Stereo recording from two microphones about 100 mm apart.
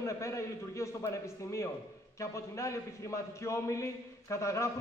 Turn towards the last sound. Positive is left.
turn(degrees=30)  # may be behind; listen again after turning